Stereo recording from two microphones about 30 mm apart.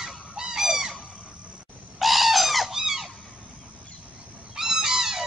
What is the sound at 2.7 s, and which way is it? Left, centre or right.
Squeak, centre.